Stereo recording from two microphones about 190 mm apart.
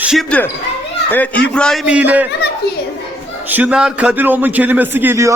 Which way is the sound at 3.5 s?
10° right (ahead or behind).